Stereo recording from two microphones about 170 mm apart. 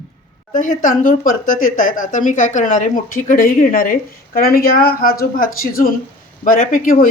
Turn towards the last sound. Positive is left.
turn(degrees=55)  # may be behind; listen again after turning